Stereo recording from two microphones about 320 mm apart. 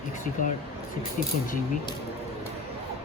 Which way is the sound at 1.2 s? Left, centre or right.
Left.